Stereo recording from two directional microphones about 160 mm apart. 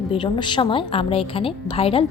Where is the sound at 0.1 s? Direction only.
30° left (ahead or behind).